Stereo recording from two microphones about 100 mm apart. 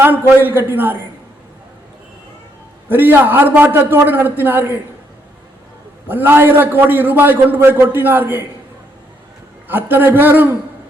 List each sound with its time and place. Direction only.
0.0 s a man's voice: 20° right (ahead or behind)
2.9 s a man's voice: 20° right (ahead or behind)
6.1 s a man's voice: 20° right (ahead or behind)
9.6 s a man's voice: 20° right (ahead or behind)